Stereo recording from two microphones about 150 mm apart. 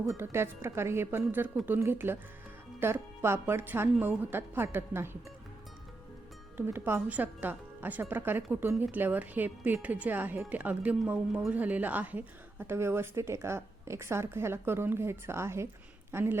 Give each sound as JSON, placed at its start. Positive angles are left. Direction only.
{"t": 0.0, "sound": "speech", "side_deg": -20}
{"t": 6.6, "sound": "speech", "side_deg": -15}